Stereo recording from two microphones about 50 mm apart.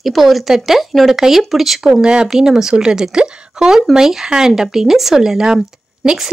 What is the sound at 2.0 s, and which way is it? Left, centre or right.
Speech, centre.